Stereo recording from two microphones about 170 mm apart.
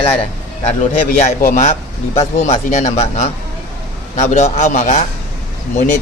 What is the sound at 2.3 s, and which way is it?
Speech, 45° left (ahead or behind).